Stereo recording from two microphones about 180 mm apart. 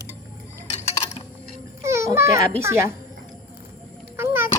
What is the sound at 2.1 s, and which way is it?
Children playing, 15° right (ahead or behind).